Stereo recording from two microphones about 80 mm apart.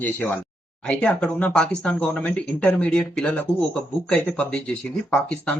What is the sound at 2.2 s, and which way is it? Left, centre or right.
Speech, centre.